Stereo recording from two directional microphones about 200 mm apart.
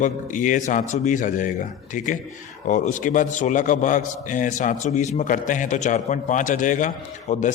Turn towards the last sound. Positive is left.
turn(degrees=40)  # may be behind; listen again after turning